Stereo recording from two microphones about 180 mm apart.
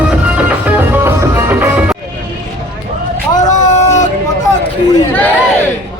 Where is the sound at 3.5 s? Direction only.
40° left (ahead or behind).